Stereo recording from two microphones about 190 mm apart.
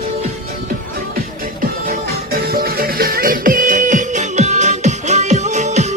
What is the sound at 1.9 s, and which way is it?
Music, 55° right (ahead or behind).